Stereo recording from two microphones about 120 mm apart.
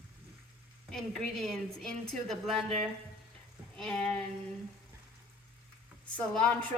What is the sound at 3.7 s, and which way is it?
Speech, 5° left (ahead or behind).